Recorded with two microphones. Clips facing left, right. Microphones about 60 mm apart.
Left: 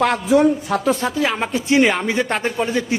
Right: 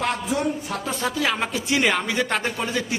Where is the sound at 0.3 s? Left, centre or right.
Left.